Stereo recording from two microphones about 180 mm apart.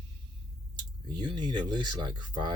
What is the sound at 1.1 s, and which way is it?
Speech, 25° right (ahead or behind).